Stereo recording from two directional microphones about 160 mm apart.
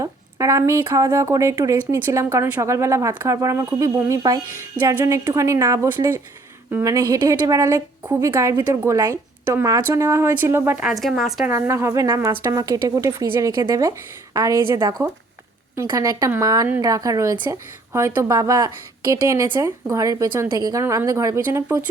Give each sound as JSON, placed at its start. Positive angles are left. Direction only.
{"t": 0.0, "sound": "speech", "side_deg": -20}
{"t": 11.0, "sound": "speech", "side_deg": 0}
{"t": 11.4, "sound": "speech", "side_deg": -15}